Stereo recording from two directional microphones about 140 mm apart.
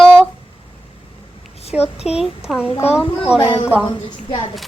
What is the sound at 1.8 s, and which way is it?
Speech, 45° left (ahead or behind).